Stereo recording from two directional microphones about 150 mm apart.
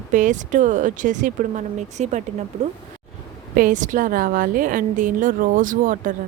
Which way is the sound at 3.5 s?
60° right (ahead or behind).